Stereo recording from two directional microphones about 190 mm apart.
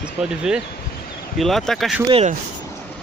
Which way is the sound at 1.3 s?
Centre (ahead or behind).